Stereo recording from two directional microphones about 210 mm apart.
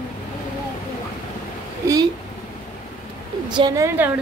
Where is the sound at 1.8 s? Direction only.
15° right (ahead or behind).